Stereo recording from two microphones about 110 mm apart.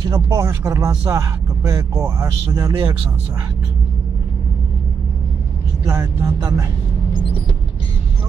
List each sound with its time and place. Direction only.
0.0 s speech: 30° right (ahead or behind)
5.9 s speech: 25° right (ahead or behind)